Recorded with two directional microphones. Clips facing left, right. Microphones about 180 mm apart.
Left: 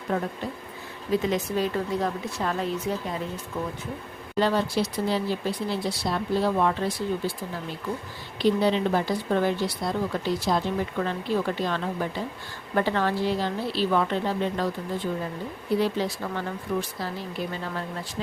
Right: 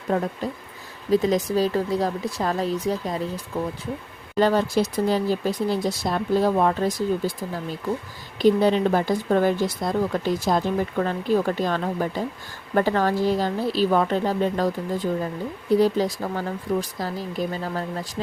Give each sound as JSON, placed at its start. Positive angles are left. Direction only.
{"t": 0.1, "sound": "speech", "side_deg": -35}